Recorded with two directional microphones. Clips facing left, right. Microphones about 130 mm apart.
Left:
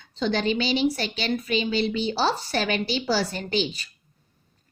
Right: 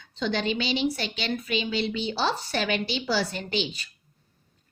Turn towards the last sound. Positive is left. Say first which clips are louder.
# left 2 dB
turn(degrees=40)  # may be behind; listen again after turning